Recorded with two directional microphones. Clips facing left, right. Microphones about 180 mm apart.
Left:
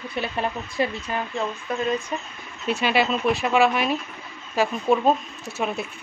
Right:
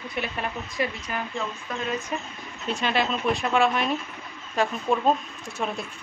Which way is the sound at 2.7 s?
5° left (ahead or behind).